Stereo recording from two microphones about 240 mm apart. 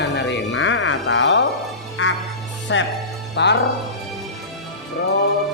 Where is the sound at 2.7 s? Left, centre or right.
Left.